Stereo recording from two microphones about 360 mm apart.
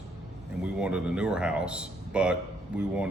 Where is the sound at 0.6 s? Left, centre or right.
Centre.